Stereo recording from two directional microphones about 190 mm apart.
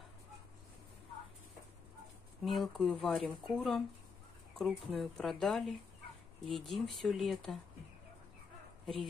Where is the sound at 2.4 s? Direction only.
Centre (ahead or behind).